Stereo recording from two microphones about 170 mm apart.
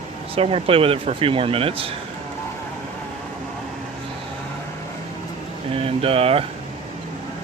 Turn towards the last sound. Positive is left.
turn(degrees=-35)  # may be behind; listen again after turning